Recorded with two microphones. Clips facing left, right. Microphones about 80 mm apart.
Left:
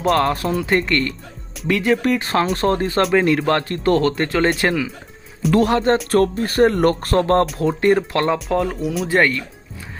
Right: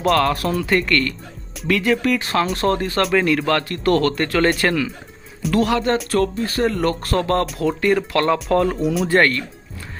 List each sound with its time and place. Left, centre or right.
0.2 s speech: left
4.6 s speech: centre
5.5 s speech: left
8.4 s speech: centre